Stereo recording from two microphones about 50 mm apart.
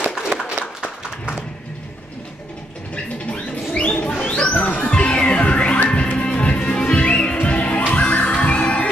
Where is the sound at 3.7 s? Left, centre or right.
Centre.